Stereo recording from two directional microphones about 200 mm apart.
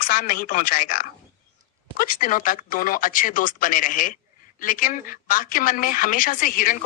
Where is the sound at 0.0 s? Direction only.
45° left (ahead or behind).